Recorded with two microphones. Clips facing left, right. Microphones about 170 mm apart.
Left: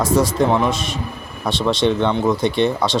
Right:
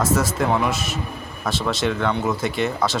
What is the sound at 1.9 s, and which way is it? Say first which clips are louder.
Speech: left 4 dB; 25° left (ahead or behind).